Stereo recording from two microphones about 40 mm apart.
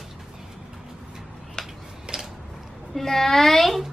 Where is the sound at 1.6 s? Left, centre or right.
Centre.